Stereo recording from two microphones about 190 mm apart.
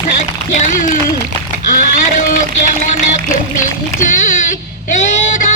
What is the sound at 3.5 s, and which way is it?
Splash, 40° left (ahead or behind).